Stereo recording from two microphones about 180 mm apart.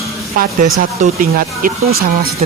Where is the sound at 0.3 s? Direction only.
50° right (ahead or behind).